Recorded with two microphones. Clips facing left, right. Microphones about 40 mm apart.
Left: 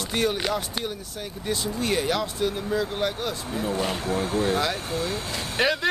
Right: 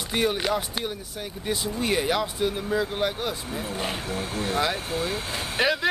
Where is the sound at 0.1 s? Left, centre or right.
Centre.